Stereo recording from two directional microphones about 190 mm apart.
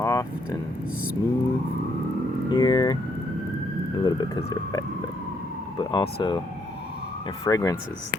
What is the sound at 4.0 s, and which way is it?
Speech, 20° left (ahead or behind).